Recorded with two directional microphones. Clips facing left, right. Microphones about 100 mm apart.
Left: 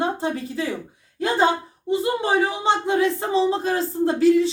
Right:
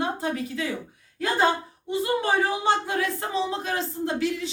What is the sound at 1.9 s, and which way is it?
Speech, 25° left (ahead or behind).